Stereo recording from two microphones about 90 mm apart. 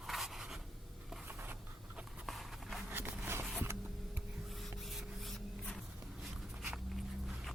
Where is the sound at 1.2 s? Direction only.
20° right (ahead or behind).